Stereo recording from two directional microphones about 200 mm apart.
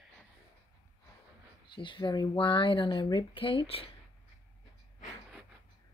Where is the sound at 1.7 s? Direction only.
25° left (ahead or behind).